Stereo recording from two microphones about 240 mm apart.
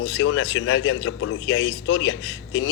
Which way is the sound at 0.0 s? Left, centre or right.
Left.